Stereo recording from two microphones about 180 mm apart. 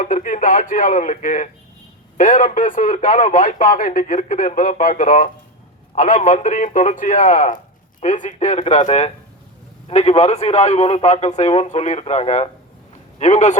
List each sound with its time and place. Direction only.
0.0 s a man's voice: 45° left (ahead or behind)